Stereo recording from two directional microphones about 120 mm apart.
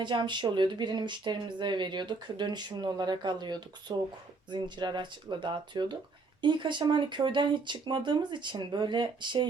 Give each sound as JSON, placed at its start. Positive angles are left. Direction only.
{"t": 0.0, "sound": "speech", "side_deg": -40}